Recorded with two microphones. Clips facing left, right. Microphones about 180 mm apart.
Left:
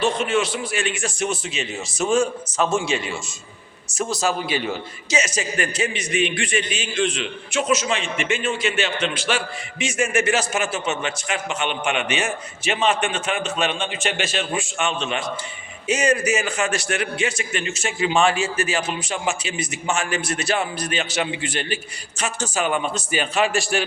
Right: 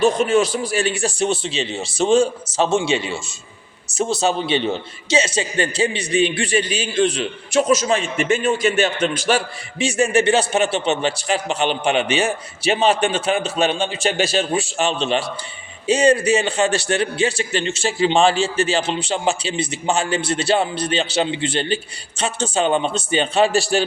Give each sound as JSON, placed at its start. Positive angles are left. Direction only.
{"t": 0.0, "sound": "a man's voice", "side_deg": -40}